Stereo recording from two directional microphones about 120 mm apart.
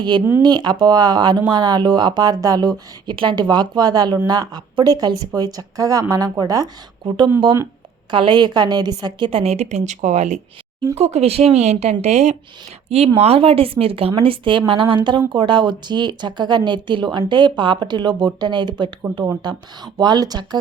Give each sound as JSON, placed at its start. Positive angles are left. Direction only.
{"t": 0.4, "sound": "speech", "side_deg": -35}
{"t": 9.4, "sound": "speech", "side_deg": -65}
{"t": 10.9, "sound": "speech", "side_deg": -60}
{"t": 13.1, "sound": "speech", "side_deg": -55}